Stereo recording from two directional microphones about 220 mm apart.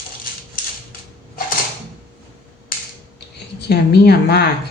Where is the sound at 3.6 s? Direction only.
50° left (ahead or behind).